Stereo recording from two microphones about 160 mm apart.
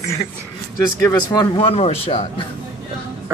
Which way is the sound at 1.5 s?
35° left (ahead or behind).